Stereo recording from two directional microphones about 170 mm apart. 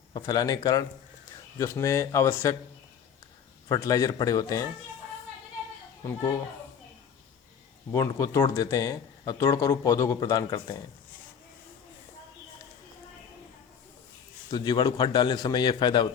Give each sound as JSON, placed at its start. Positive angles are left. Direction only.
{"t": 0.1, "sound": "speech", "side_deg": 25}
{"t": 3.7, "sound": "speech", "side_deg": 20}
{"t": 6.0, "sound": "a child's voice", "side_deg": 20}
{"t": 7.9, "sound": "speech", "side_deg": 20}
{"t": 14.5, "sound": "speech", "side_deg": 25}